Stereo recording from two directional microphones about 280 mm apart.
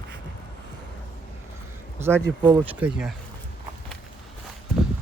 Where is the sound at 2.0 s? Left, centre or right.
Centre.